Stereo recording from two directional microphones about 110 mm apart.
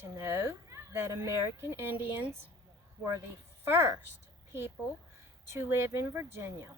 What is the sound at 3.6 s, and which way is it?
Speech, 25° right (ahead or behind).